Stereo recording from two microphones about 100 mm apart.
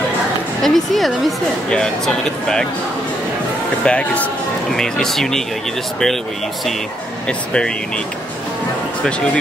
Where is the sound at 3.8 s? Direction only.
15° left (ahead or behind).